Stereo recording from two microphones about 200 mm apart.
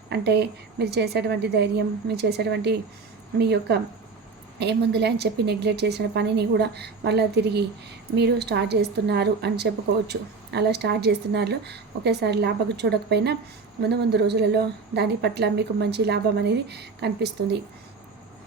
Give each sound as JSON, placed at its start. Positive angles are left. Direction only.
{"t": 0.1, "sound": "a woman's voice", "side_deg": -55}